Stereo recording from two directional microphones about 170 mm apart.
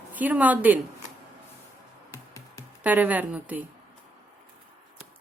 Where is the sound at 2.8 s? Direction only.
10° right (ahead or behind).